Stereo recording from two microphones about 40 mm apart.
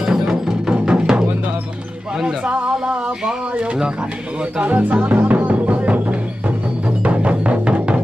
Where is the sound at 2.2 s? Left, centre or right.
Centre.